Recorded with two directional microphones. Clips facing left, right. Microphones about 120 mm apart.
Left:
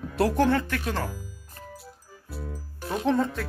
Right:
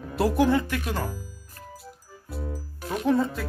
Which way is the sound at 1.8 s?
Centre (ahead or behind).